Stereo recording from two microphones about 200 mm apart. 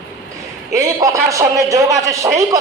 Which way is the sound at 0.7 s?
15° right (ahead or behind).